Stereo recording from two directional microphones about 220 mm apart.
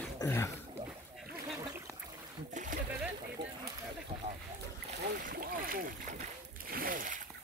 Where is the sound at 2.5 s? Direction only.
35° right (ahead or behind).